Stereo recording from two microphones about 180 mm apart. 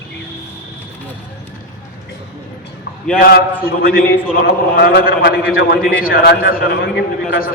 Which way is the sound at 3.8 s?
55° left (ahead or behind).